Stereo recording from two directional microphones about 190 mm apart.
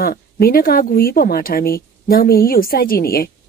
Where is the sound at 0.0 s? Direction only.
50° left (ahead or behind).